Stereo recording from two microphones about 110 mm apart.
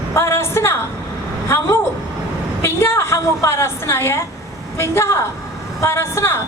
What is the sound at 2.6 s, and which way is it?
A woman's voice, 20° left (ahead or behind).